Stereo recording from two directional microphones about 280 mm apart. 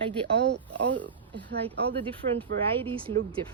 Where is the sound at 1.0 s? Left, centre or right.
Centre.